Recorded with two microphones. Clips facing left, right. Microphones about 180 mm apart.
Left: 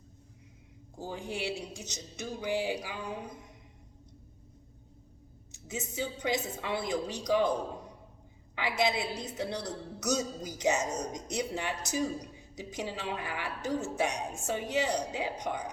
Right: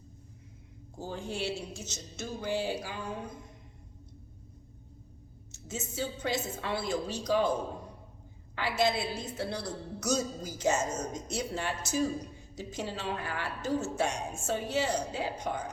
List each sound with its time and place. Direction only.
0.9 s a woman's voice: 15° left (ahead or behind)
5.5 s a woman's voice: 15° left (ahead or behind)
8.5 s a woman's voice: 15° left (ahead or behind)